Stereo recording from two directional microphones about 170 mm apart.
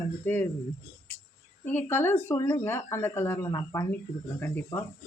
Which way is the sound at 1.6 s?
10° left (ahead or behind).